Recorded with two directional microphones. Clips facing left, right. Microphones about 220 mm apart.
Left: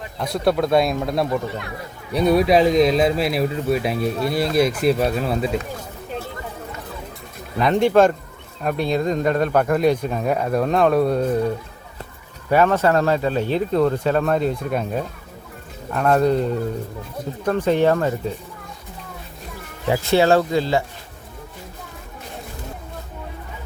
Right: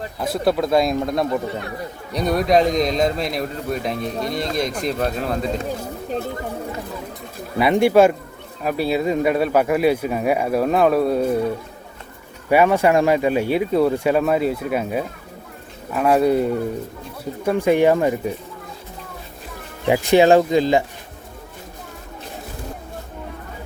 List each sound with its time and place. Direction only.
0.2 s a man's voice: centre (ahead or behind)
7.6 s speech: 10° right (ahead or behind)
12.5 s speech: 10° right (ahead or behind)
19.9 s speech: 15° right (ahead or behind)